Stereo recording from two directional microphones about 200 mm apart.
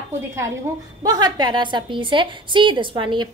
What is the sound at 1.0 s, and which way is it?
A woman's voice, 20° right (ahead or behind).